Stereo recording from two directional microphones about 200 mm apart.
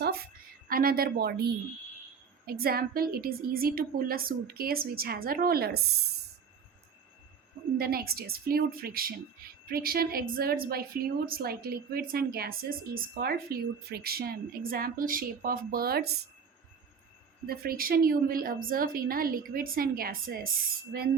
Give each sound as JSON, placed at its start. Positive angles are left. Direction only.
{"t": 0.7, "sound": "a woman's voice", "side_deg": -45}
{"t": 7.8, "sound": "a woman's voice", "side_deg": -50}
{"t": 17.4, "sound": "a woman's voice", "side_deg": -50}